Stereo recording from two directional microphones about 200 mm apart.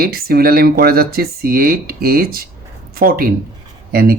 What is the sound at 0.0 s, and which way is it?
Speech, 50° right (ahead or behind).